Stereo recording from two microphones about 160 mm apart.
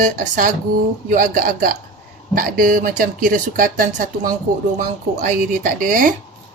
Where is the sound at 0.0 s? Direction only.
60° right (ahead or behind).